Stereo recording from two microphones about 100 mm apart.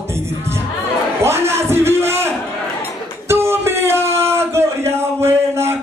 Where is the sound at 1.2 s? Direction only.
25° right (ahead or behind).